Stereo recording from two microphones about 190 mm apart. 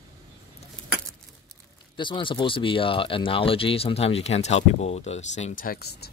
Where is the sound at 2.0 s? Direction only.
25° left (ahead or behind).